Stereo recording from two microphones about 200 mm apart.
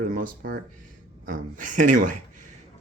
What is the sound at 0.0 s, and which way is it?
A man's voice, 40° right (ahead or behind).